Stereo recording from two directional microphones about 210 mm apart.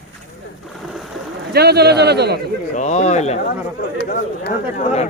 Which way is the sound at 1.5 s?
50° right (ahead or behind).